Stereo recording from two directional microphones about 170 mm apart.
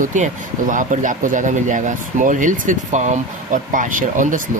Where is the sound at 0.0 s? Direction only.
50° right (ahead or behind).